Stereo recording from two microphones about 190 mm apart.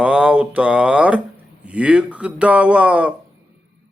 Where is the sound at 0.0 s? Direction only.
5° right (ahead or behind).